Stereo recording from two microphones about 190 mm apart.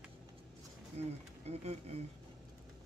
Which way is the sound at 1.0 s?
35° right (ahead or behind).